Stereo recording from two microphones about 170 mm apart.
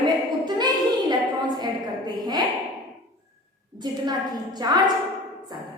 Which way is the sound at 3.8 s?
25° right (ahead or behind).